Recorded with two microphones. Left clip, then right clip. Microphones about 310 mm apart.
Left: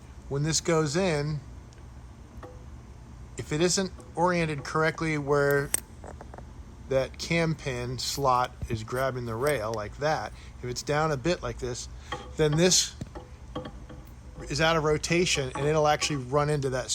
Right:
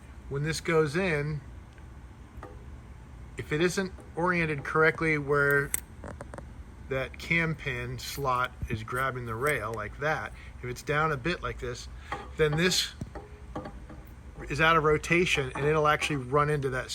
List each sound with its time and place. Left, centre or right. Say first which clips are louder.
0.3 s speech: even; centre
3.3 s speech: left 1 dB; centre
6.1 s a sound: right 3 dB; right
6.8 s speech: left 4 dB; centre
14.4 s speech: right 1 dB; centre